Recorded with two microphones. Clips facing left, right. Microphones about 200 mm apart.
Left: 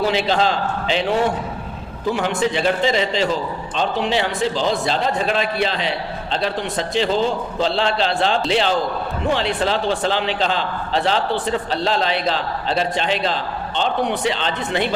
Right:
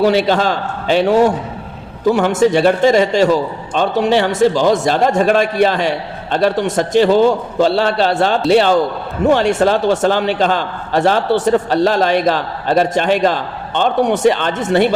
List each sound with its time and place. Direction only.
0.1 s a man's voice: 50° right (ahead or behind)
7.8 s a man's voice: 45° right (ahead or behind)